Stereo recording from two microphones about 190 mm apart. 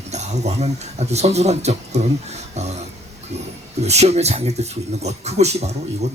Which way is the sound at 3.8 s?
35° right (ahead or behind).